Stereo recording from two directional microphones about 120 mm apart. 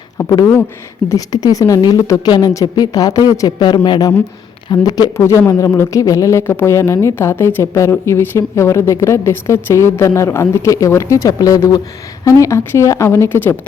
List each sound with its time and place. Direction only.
1.1 s a woman's voice: 30° left (ahead or behind)
5.1 s speech: 20° left (ahead or behind)